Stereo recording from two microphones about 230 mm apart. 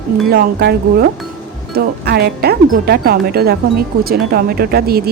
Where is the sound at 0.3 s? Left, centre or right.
Right.